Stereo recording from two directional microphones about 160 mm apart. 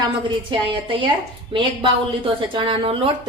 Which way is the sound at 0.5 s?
30° right (ahead or behind).